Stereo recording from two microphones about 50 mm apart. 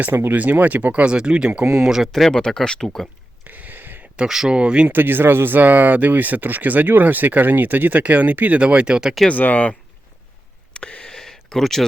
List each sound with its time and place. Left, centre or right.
0.1 s speech: right
0.3 s speech: right
1.9 s speech: centre
2.3 s speech: centre
3.4 s a sound: right
4.2 s speech: centre
4.9 s speech: right
8.6 s speech: centre
9.3 s speech: left
10.8 s a sound: left
11.1 s a sound: centre